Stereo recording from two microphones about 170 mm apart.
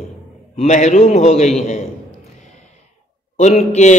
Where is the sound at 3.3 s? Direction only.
40° left (ahead or behind).